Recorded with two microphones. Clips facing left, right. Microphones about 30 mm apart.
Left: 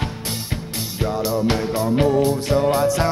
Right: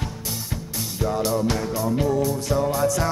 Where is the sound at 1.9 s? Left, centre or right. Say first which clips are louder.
Left 6 dB; left.